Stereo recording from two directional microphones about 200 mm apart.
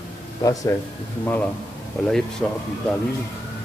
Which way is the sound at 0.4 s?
15° left (ahead or behind).